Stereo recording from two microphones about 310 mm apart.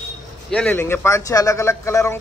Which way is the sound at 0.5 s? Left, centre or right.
Centre.